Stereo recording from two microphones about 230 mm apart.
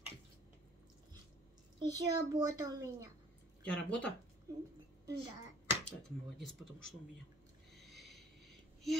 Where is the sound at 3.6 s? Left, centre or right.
Centre.